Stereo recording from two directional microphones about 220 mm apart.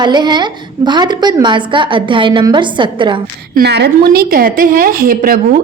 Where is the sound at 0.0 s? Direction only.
20° right (ahead or behind).